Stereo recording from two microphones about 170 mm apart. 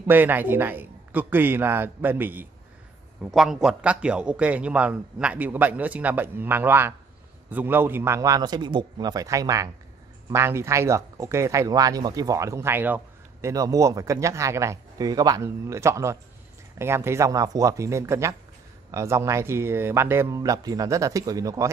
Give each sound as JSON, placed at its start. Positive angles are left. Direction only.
{"t": 0.0, "sound": "a man's voice", "side_deg": -10}